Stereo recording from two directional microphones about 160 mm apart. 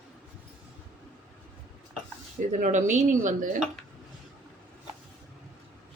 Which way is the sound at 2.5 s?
50° right (ahead or behind).